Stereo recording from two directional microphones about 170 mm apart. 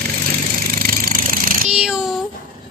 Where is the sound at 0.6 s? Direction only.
60° right (ahead or behind).